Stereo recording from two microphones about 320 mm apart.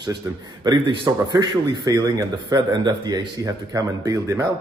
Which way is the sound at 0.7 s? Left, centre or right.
Centre.